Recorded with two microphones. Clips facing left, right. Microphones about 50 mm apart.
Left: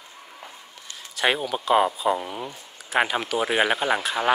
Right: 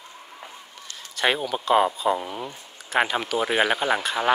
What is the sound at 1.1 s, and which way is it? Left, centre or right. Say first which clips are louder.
Speech: even; centre.